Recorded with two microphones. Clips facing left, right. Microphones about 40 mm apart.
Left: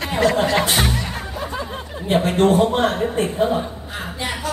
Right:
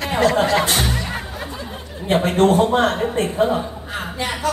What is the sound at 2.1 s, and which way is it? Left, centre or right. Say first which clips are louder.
A man's voice: right 1 dB; right.